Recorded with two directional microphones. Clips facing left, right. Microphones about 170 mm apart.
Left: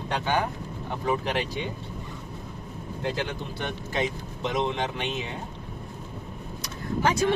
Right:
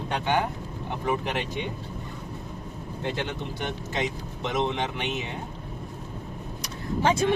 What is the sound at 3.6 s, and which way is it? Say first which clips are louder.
Speech: left 1 dB; 20° right (ahead or behind).